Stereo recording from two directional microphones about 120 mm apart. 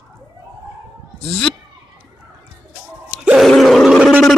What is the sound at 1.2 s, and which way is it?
Bleat, 5° left (ahead or behind).